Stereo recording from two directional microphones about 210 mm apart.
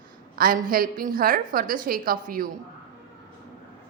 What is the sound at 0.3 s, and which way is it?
A woman's voice, 45° right (ahead or behind).